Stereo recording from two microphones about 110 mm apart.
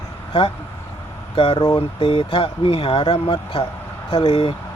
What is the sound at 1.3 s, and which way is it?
Speech, 55° left (ahead or behind).